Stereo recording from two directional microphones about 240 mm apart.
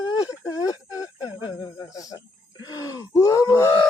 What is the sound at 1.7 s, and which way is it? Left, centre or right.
Groan, centre.